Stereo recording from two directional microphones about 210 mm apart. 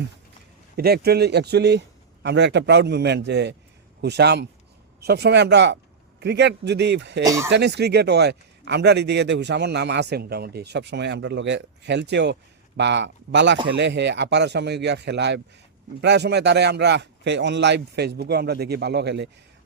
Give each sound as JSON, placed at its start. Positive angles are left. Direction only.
{"t": 0.8, "sound": "a man's voice", "side_deg": -50}
{"t": 7.3, "sound": "speech", "side_deg": -15}
{"t": 7.5, "sound": "a man's voice", "side_deg": -55}